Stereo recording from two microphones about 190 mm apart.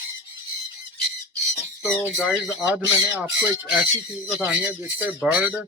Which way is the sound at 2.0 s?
5° right (ahead or behind).